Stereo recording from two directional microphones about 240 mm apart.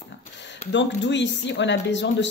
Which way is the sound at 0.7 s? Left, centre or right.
Left.